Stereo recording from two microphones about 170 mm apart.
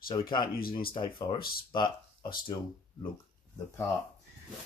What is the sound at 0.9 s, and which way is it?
Speech, 25° left (ahead or behind).